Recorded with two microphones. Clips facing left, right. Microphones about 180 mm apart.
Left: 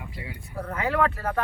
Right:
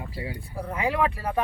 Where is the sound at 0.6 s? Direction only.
15° right (ahead or behind).